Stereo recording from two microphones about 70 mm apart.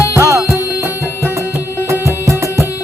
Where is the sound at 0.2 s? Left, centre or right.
Right.